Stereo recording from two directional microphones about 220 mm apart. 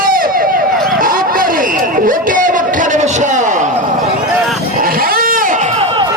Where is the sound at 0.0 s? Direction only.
40° right (ahead or behind).